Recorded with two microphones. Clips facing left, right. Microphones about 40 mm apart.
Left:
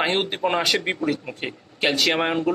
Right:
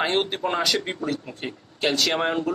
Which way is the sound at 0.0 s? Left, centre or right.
Centre.